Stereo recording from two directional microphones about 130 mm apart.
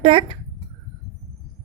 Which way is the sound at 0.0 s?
45° right (ahead or behind).